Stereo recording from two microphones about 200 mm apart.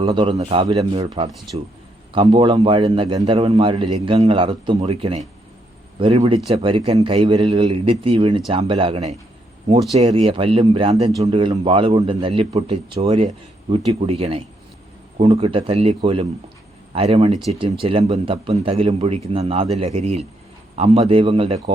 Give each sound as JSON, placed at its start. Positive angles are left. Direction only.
{"t": 0.0, "sound": "a man's voice", "side_deg": -25}